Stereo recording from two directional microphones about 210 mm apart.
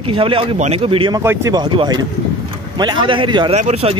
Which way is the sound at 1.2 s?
10° right (ahead or behind).